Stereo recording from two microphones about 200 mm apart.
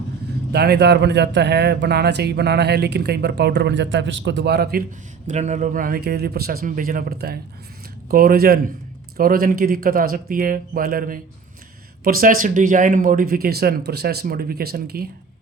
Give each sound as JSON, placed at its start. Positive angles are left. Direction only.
{"t": 0.5, "sound": "speech", "side_deg": -55}
{"t": 5.3, "sound": "speech", "side_deg": -35}